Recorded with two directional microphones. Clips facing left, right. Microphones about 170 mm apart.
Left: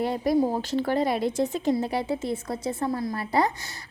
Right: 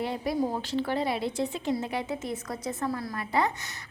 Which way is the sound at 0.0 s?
40° left (ahead or behind).